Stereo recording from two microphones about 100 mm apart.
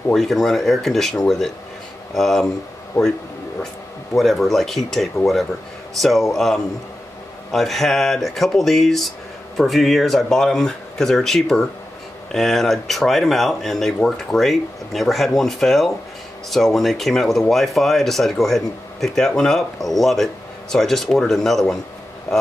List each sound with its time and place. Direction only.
0.1 s speech: centre (ahead or behind)
2.9 s speech: 30° left (ahead or behind)
4.2 s speech: centre (ahead or behind)